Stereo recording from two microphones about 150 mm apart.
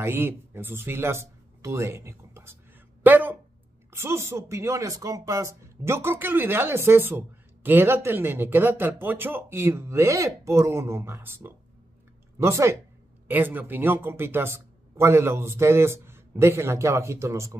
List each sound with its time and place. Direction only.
0.0 s speech: 15° right (ahead or behind)